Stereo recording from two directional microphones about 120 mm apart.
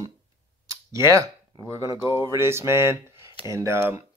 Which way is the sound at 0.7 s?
25° right (ahead or behind).